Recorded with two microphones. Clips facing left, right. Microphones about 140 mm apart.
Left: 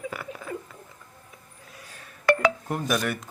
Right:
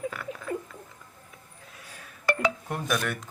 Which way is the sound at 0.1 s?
5° left (ahead or behind).